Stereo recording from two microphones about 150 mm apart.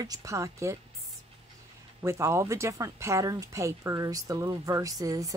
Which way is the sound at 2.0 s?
20° right (ahead or behind).